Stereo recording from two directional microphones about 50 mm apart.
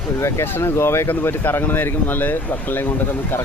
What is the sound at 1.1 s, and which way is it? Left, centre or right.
Speech, left.